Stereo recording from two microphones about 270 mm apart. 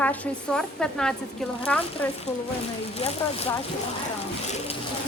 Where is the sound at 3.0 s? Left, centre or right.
Left.